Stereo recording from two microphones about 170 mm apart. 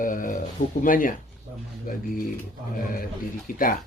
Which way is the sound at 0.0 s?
50° left (ahead or behind).